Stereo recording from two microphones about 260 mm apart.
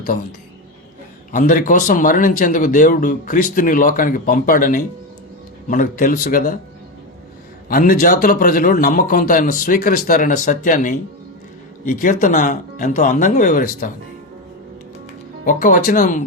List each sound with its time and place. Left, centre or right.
1.3 s a man's voice: left
7.7 s a man's voice: left
15.4 s a man's voice: left